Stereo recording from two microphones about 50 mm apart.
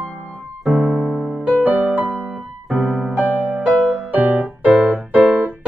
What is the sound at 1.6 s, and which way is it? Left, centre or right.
Music, right.